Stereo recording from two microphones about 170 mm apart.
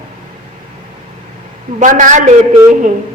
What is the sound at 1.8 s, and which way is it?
Speech, 50° right (ahead or behind).